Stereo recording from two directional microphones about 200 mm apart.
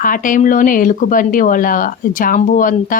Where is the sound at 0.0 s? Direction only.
45° left (ahead or behind).